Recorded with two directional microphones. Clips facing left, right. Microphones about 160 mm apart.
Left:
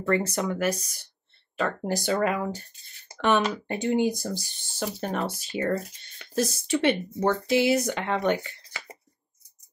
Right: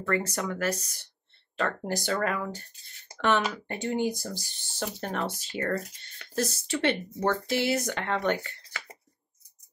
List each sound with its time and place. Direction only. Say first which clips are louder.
0.0 s speech: left 4 dB; 25° left (ahead or behind)